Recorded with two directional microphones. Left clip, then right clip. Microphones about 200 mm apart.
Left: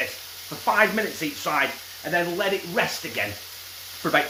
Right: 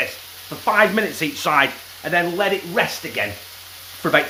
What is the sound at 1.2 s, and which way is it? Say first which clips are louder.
Speech: right 6 dB; 40° right (ahead or behind).